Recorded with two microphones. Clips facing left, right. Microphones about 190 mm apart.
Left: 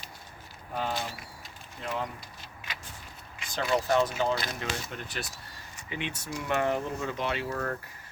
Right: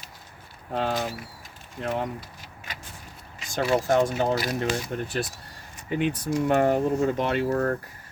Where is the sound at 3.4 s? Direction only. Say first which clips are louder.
Right 5 dB; 45° right (ahead or behind).